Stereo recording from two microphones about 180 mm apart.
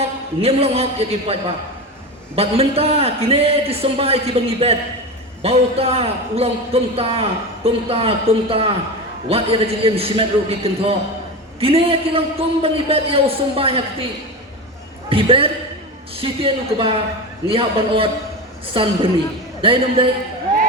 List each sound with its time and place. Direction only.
0.0 s a man's voice: 35° right (ahead or behind)
15.1 s a man's voice: 30° right (ahead or behind)